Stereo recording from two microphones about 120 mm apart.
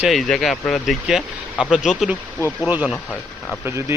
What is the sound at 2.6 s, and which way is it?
Speech, 15° right (ahead or behind).